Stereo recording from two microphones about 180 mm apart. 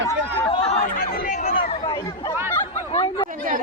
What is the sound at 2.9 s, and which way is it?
Chatter, 25° left (ahead or behind).